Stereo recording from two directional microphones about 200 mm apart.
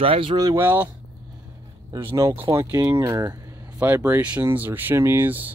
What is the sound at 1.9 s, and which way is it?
Speech, 20° right (ahead or behind).